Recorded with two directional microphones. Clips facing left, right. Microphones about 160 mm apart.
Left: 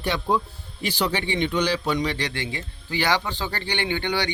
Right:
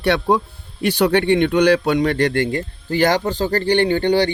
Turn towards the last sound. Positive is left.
turn(degrees=-35)  # may be behind; listen again after turning